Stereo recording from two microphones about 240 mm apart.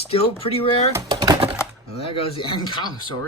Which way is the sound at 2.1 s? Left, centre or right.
Left.